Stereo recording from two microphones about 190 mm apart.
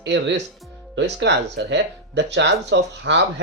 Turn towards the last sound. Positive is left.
turn(degrees=-65)  # may be behind; listen again after turning